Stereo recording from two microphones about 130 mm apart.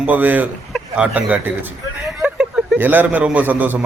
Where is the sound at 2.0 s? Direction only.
10° right (ahead or behind).